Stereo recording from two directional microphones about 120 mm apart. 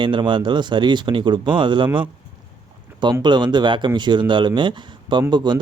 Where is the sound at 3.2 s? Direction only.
40° right (ahead or behind).